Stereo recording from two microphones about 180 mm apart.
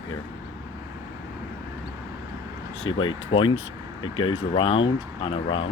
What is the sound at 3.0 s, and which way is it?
Speech, 25° left (ahead or behind).